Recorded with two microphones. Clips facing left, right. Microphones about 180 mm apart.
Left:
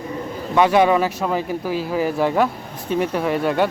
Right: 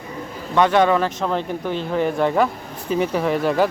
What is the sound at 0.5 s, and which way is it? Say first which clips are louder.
Speech: left 1 dB; 10° left (ahead or behind).